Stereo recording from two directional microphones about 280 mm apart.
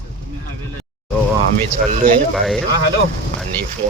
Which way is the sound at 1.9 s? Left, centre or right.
Right.